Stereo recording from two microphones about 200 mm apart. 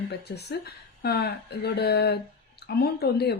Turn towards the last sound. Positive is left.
turn(degrees=55)  # may be behind; listen again after turning